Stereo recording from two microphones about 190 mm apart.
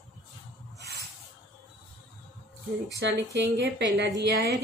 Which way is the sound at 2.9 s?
65° right (ahead or behind).